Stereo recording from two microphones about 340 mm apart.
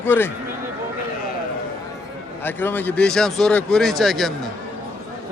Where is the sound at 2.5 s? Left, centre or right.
Centre.